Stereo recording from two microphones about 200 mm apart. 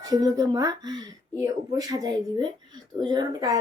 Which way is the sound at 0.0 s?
20° right (ahead or behind).